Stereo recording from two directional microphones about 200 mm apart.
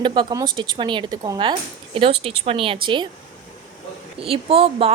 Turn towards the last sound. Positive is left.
turn(degrees=-30)  # may be behind; listen again after turning